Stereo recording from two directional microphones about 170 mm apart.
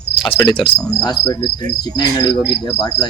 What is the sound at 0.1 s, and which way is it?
Cricket, 30° left (ahead or behind).